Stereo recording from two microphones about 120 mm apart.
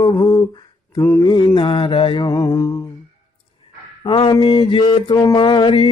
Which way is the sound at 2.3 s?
30° left (ahead or behind).